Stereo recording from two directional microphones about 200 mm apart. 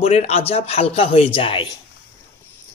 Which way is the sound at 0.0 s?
30° left (ahead or behind).